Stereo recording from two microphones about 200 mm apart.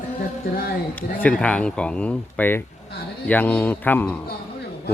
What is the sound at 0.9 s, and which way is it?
Speech, 5° left (ahead or behind).